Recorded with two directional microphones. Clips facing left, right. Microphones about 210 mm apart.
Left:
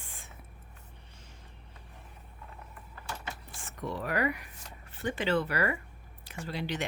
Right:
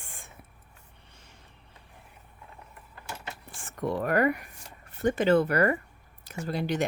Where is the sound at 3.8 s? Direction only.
50° right (ahead or behind).